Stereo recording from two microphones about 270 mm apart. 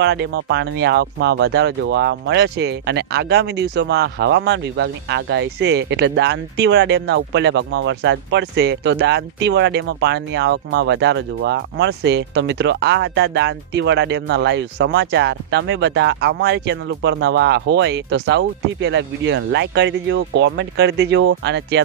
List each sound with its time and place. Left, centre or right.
0.0 s speech: right